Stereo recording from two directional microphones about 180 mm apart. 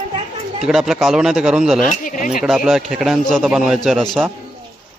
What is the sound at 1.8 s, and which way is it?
Speech, 45° left (ahead or behind).